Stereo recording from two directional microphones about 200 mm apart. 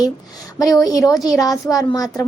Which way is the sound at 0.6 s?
20° left (ahead or behind).